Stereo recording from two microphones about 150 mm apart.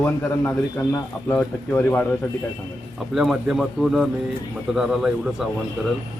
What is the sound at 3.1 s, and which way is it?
Speech, centre (ahead or behind).